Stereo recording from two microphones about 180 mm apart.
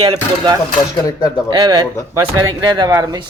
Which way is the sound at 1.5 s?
20° right (ahead or behind).